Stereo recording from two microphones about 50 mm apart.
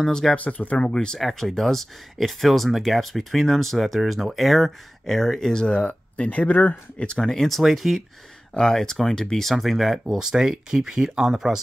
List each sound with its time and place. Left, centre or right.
0.1 s speech: centre
0.4 s speech: left
0.8 s speech: centre
6.1 s speech: left
7.2 s speech: centre
8.5 s speech: centre